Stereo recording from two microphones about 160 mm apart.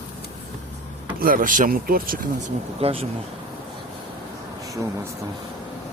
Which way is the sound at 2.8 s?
35° right (ahead or behind).